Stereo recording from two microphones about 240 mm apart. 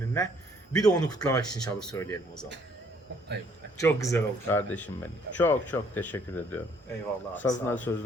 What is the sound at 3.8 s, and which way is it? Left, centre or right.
A man's voice, centre.